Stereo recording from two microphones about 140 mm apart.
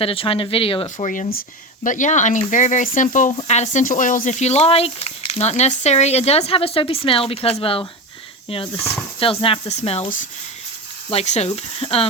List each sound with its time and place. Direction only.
0.0 s speech: 40° left (ahead or behind)
0.9 s speech: 60° left (ahead or behind)
3.4 s speech: 55° left (ahead or behind)
11.1 s speech: 50° left (ahead or behind)